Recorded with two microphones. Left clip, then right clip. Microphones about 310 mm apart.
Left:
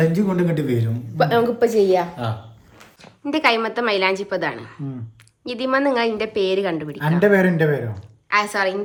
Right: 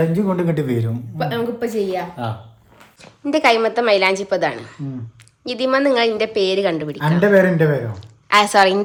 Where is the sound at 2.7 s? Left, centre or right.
Centre.